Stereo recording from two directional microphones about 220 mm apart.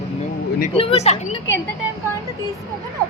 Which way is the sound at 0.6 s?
25° left (ahead or behind).